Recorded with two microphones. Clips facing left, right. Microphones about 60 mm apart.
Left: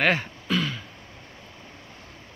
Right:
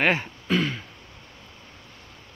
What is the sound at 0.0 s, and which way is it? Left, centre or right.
Speech, centre.